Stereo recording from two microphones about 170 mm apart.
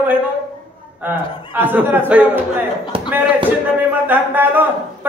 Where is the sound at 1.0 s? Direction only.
10° right (ahead or behind).